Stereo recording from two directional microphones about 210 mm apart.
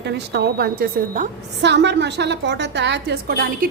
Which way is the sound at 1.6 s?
55° right (ahead or behind).